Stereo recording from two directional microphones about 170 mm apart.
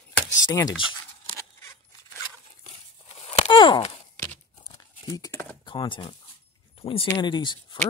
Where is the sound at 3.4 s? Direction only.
30° left (ahead or behind).